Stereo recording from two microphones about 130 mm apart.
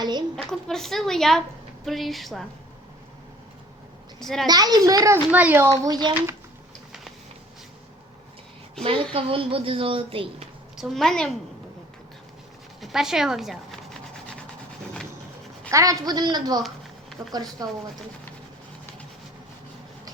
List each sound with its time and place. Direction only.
0.0 s a sound: 35° right (ahead or behind)
0.7 s a woman's voice: 5° left (ahead or behind)
4.2 s a child's voice: 5° left (ahead or behind)
4.4 s a child's voice: 30° right (ahead or behind)
5.3 s a child's voice: 15° right (ahead or behind)
5.8 s a woman's voice: 30° right (ahead or behind)
8.8 s a woman's voice: 45° right (ahead or behind)
10.8 s a woman's voice: centre (ahead or behind)
12.8 s speech: 5° right (ahead or behind)
15.7 s a woman's voice: 25° right (ahead or behind)